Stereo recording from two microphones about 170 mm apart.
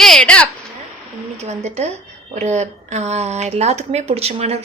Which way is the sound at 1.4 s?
40° right (ahead or behind).